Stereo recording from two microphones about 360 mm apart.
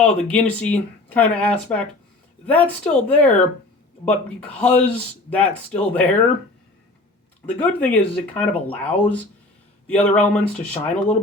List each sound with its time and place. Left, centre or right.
0.0 s speech: centre
7.4 s speech: centre
10.5 s speech: centre